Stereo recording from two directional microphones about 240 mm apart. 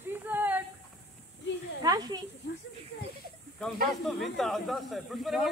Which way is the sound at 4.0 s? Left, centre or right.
Centre.